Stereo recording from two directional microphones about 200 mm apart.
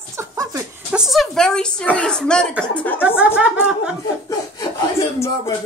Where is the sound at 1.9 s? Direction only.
5° left (ahead or behind).